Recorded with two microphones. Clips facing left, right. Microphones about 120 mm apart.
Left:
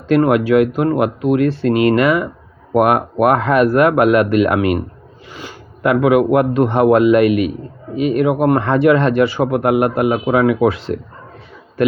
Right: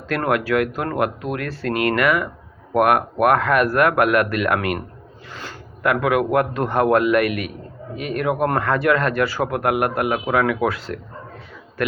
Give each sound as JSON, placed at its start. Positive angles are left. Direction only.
{"t": 0.2, "sound": "speech", "side_deg": 20}